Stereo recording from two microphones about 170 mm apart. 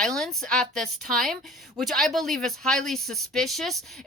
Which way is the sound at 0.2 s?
Centre (ahead or behind).